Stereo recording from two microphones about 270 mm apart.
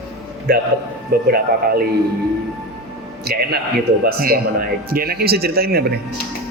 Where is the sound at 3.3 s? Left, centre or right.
Right.